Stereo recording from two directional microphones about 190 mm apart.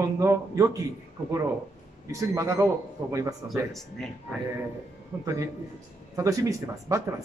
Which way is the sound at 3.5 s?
Centre (ahead or behind).